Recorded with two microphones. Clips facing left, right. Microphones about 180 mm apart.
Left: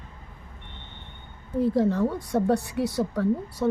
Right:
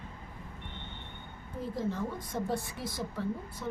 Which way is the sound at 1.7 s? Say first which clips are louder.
Left 8 dB; 70° left (ahead or behind).